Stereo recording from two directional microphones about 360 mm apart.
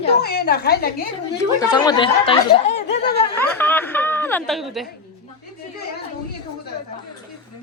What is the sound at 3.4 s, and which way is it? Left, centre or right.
Speech, centre.